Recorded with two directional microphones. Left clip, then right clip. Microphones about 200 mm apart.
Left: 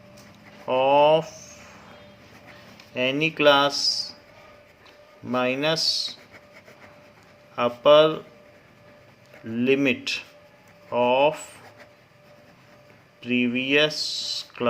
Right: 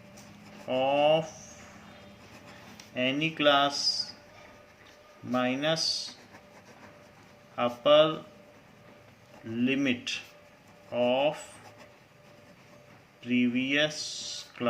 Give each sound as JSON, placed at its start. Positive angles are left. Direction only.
{"t": 0.7, "sound": "speech", "side_deg": 45}
{"t": 2.9, "sound": "speech", "side_deg": 45}
{"t": 5.3, "sound": "speech", "side_deg": 45}
{"t": 7.5, "sound": "speech", "side_deg": 45}
{"t": 9.5, "sound": "speech", "side_deg": 45}
{"t": 11.1, "sound": "speech", "side_deg": 45}
{"t": 13.2, "sound": "speech", "side_deg": 45}